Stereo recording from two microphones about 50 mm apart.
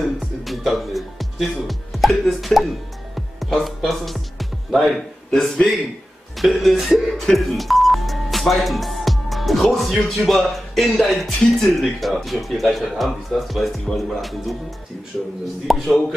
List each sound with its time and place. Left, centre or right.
0.0 s speech: centre
15.6 s speech: centre